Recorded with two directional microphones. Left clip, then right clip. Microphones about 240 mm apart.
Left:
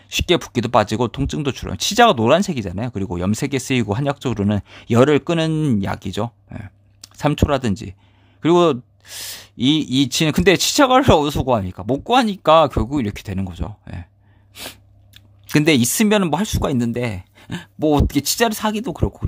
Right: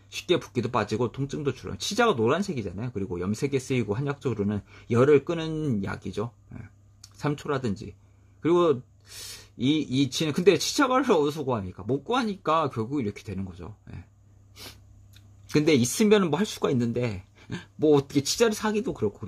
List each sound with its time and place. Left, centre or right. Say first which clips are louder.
0.1 s speech: left 8 dB; left
14.5 s sneeze: left 11 dB; left
15.4 s speech: left 6 dB; left